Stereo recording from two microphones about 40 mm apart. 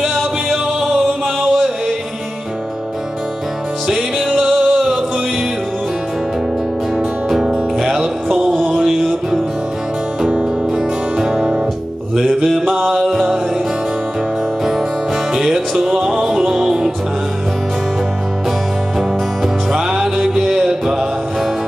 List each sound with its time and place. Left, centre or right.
0.5 s music: centre
3.8 s music: centre
7.0 s music: centre
8.6 s a sound: centre
10.3 s music: centre
12.2 s mantra: centre
13.0 s music: centre
15.3 s music: centre
18.9 s music: centre